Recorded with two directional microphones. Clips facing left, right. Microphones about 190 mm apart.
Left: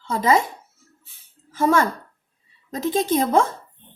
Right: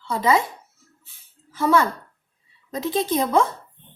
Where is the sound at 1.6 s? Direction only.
45° left (ahead or behind).